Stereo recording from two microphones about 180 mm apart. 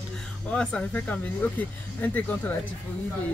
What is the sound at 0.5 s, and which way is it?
Speech, 5° left (ahead or behind).